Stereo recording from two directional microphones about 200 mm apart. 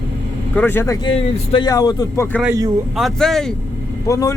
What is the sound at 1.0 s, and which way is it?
Speech, 25° left (ahead or behind).